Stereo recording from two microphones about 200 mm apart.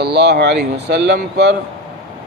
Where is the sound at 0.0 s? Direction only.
55° right (ahead or behind).